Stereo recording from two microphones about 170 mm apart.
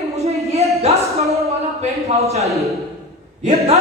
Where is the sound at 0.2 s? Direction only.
40° right (ahead or behind).